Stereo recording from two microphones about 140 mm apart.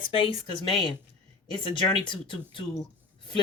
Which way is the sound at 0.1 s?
40° left (ahead or behind).